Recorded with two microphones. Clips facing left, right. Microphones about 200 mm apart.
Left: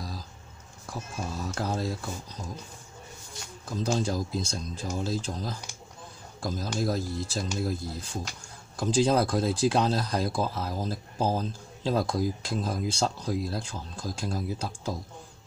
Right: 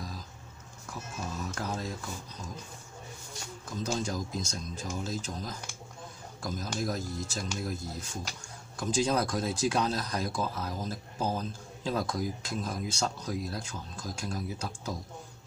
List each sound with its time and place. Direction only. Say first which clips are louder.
0.8 s speech: left 3 dB; 30° left (ahead or behind)
3.7 s speech: left 5 dB; 35° left (ahead or behind)